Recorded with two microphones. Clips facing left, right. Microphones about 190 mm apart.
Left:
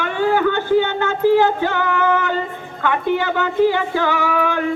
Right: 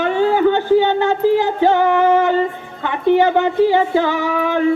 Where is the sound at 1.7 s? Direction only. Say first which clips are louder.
Right 5 dB; 20° right (ahead or behind).